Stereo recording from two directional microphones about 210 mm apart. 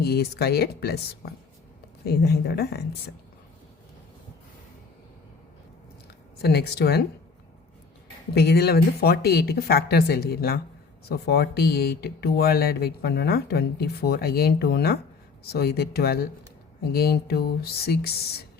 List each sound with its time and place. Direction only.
0.0 s speech: 50° left (ahead or behind)
6.4 s speech: 50° left (ahead or behind)
8.4 s speech: 50° left (ahead or behind)